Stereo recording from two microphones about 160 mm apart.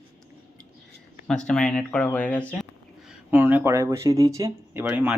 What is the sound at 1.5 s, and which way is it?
Speech, 5° left (ahead or behind).